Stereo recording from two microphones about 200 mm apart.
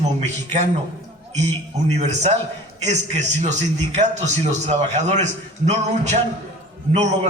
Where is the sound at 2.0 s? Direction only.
35° right (ahead or behind).